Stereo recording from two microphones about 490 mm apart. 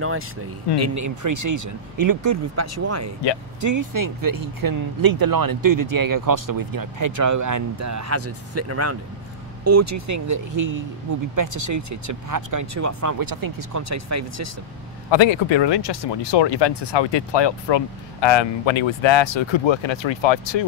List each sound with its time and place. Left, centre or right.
0.7 s speech: right
15.0 s speech: left